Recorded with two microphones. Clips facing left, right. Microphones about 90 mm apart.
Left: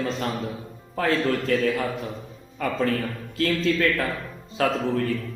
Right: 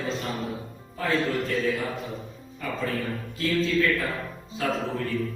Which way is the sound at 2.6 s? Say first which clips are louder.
Left 5 dB; 90° left.